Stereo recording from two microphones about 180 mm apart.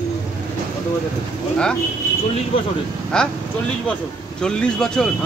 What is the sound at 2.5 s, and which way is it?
Speech, 30° left (ahead or behind).